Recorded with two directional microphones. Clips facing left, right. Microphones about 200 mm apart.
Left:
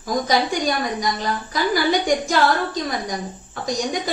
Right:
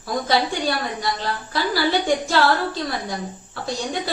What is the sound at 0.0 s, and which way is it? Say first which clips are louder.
A woman's voice: left 1 dB; 15° left (ahead or behind).